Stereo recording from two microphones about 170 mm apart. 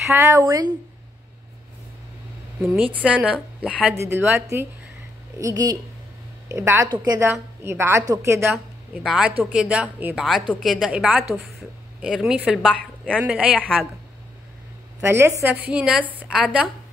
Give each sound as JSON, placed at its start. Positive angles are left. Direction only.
{"t": 0.1, "sound": "speech", "side_deg": -20}
{"t": 2.7, "sound": "a woman's voice", "side_deg": -10}
{"t": 15.0, "sound": "a woman's voice", "side_deg": -15}